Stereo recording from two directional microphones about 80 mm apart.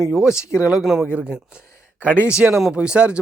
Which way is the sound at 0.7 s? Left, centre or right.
Centre.